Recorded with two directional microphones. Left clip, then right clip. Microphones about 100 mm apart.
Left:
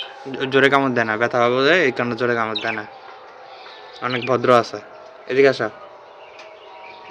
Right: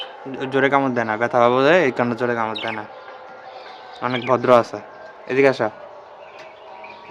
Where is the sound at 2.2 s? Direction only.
15° right (ahead or behind).